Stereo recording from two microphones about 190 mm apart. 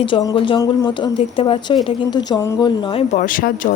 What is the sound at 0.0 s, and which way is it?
Speech, 25° left (ahead or behind).